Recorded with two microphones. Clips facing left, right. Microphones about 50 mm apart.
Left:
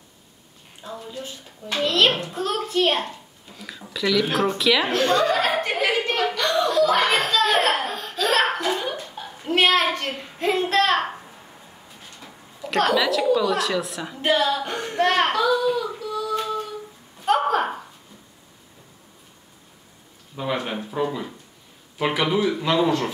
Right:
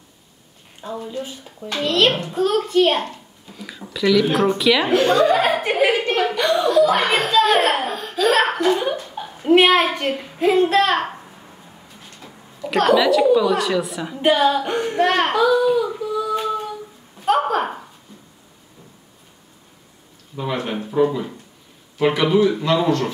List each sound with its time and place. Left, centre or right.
0.8 s a woman's voice: centre
1.8 s a woman's voice: centre
4.9 s chuckle: centre
6.6 s a sound: centre
7.6 s laughter: centre
9.1 s a child's voice: centre
12.6 s a woman's voice: centre
14.2 s child singing: centre
17.2 s a sound: centre
20.6 s a woman's voice: centre